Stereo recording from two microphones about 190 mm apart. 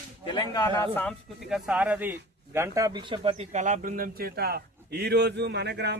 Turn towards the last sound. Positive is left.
turn(degrees=-65)  # may be behind; listen again after turning